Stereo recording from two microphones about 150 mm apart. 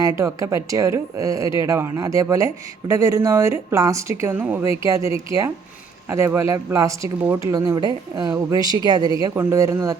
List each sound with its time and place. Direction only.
0.2 s speech: 20° right (ahead or behind)